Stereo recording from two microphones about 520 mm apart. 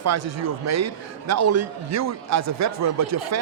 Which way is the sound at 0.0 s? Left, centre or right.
Right.